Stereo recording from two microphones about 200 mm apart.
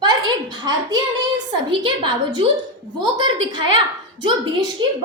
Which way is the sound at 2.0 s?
20° right (ahead or behind).